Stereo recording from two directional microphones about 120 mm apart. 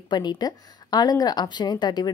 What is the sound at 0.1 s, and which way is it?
Speech, 35° left (ahead or behind).